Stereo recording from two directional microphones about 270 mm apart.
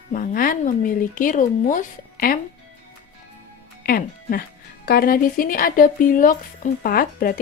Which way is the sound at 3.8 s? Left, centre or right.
Left.